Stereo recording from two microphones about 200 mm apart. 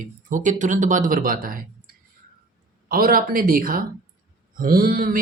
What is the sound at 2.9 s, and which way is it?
Speech, 45° right (ahead or behind).